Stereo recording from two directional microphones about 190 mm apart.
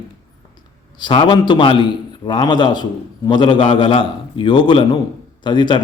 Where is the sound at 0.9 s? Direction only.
25° left (ahead or behind).